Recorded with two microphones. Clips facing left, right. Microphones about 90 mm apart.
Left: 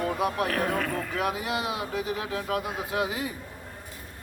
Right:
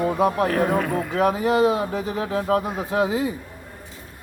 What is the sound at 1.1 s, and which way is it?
Speech, 35° right (ahead or behind).